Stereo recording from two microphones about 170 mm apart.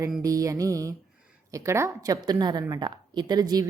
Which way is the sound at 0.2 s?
20° right (ahead or behind).